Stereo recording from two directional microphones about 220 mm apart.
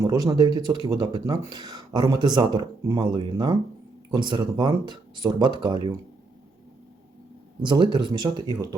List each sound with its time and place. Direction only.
0.0 s speech: 15° right (ahead or behind)
7.6 s speech: 20° right (ahead or behind)